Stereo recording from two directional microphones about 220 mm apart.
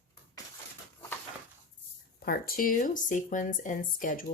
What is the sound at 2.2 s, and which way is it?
Speech, 40° left (ahead or behind).